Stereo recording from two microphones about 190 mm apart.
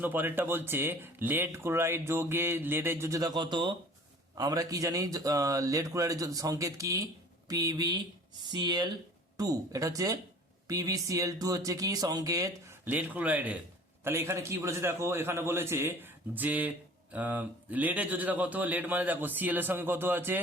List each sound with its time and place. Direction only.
0.0 s a man's voice: 10° right (ahead or behind)